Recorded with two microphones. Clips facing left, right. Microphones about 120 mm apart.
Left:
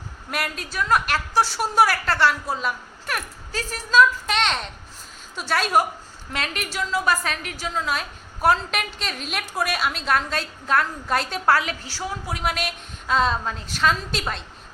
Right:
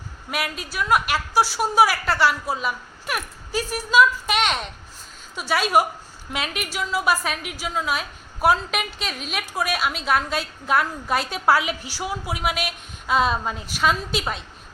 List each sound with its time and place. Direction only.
0.3 s a woman's voice: 5° right (ahead or behind)